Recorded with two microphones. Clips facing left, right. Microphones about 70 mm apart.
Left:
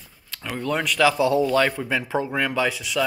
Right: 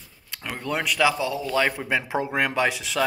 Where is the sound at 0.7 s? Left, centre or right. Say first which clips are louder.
Left 2 dB; centre; by 2.8 s right.